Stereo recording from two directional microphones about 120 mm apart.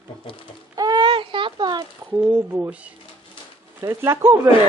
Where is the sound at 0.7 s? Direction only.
35° right (ahead or behind).